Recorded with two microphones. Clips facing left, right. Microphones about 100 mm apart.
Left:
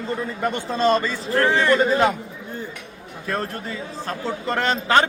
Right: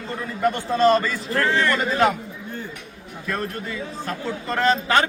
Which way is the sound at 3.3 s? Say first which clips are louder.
Left 1 dB; 30° left (ahead or behind).